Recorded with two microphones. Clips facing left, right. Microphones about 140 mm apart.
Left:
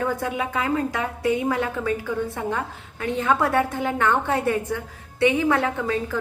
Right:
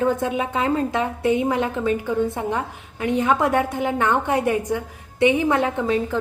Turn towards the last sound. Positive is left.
turn(degrees=-20)  # may be behind; listen again after turning